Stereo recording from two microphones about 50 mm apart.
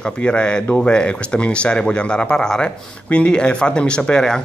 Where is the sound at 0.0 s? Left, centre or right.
Left.